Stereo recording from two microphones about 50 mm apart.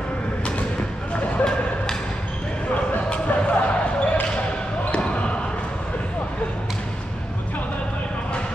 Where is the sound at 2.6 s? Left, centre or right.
Left.